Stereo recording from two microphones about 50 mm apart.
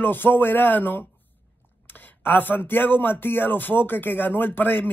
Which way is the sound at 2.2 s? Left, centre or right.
Left.